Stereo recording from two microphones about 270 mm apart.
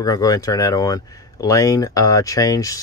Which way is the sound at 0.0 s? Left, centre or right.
Centre.